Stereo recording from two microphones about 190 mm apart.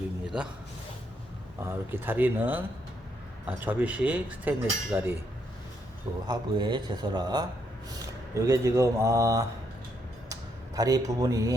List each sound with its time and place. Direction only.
1.6 s speech: 10° right (ahead or behind)
6.2 s a man's voice: 20° right (ahead or behind)
10.8 s speech: 20° right (ahead or behind)